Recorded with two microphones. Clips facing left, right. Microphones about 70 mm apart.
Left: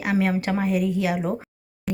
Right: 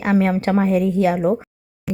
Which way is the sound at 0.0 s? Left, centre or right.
Right.